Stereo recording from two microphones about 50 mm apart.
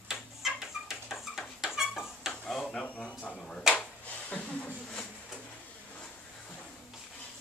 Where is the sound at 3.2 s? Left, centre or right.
Centre.